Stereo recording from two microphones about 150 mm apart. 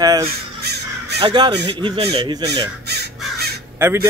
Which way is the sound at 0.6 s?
90° right.